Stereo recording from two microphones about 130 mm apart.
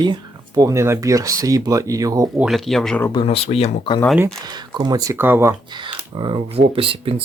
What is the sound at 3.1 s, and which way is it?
Speech, 35° left (ahead or behind).